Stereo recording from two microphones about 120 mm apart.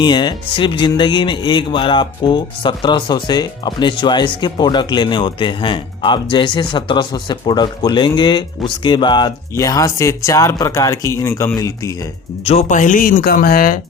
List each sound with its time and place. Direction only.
0.0 s speech: 40° left (ahead or behind)
12.5 s speech: 75° left (ahead or behind); by 13.2 s 90° left